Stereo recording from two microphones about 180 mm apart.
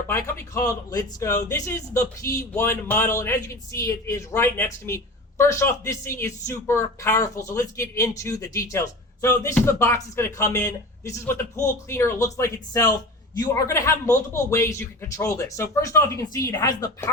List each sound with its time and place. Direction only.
0.1 s speech: 15° left (ahead or behind)